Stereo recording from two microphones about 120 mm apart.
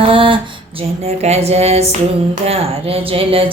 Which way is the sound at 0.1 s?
45° right (ahead or behind).